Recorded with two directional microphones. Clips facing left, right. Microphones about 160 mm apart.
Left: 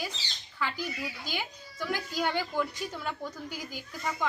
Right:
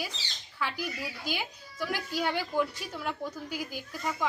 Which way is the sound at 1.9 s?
5° right (ahead or behind).